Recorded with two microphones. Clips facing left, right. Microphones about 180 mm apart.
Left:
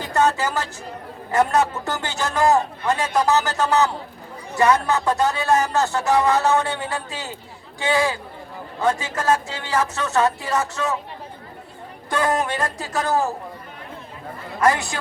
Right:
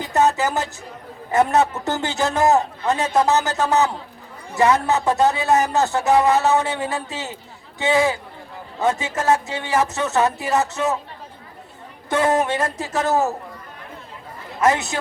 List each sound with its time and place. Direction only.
0.0 s music: 20° right (ahead or behind)
1.3 s a man's voice: 20° right (ahead or behind)
12.0 s a man's voice: 20° right (ahead or behind)
14.6 s a man's voice: 20° right (ahead or behind)